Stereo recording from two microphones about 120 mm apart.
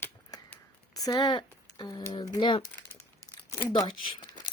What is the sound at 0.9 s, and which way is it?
Speech, 30° left (ahead or behind).